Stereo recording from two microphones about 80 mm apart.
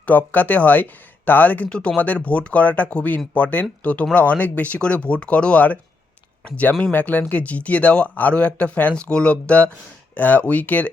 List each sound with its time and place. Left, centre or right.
0.0 s speech: left